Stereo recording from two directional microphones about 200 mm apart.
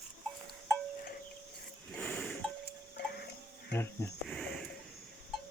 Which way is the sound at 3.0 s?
55° left (ahead or behind).